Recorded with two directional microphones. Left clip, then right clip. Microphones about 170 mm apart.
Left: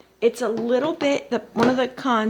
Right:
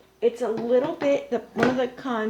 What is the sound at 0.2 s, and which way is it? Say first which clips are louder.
A woman's voice: left 3 dB; 45° left (ahead or behind).